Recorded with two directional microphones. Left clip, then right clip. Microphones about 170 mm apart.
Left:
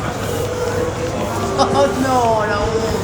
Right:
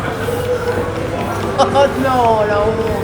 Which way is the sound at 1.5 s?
35° right (ahead or behind).